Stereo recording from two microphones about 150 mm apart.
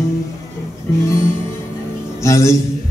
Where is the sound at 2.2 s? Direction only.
20° left (ahead or behind).